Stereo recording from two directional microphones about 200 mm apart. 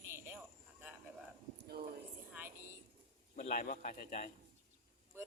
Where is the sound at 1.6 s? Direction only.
50° right (ahead or behind).